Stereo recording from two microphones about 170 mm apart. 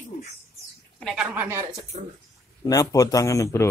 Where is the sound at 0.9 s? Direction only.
Centre (ahead or behind).